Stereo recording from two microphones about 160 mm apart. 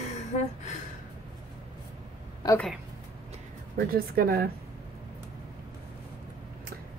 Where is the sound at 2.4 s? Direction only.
25° left (ahead or behind).